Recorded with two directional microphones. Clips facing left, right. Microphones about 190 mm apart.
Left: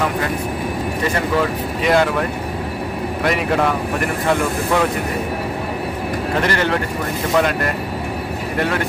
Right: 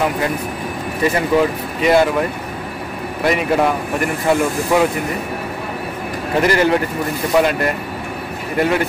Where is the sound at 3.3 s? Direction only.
5° right (ahead or behind).